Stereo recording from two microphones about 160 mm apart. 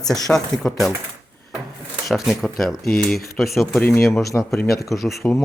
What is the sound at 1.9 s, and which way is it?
Speech, centre (ahead or behind).